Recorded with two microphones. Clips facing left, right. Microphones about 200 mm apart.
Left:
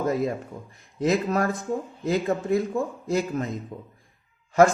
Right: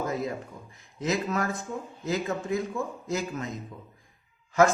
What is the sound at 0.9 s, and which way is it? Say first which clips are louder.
Speech: left 5 dB; 35° left (ahead or behind).